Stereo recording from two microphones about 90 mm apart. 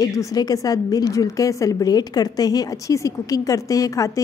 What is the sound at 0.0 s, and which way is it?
A woman's voice, 40° left (ahead or behind).